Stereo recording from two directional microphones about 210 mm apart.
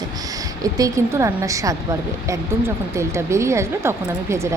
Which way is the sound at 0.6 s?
15° right (ahead or behind).